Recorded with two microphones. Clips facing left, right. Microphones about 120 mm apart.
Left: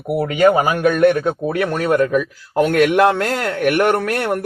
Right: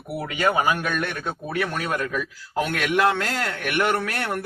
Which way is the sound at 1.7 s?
50° left (ahead or behind).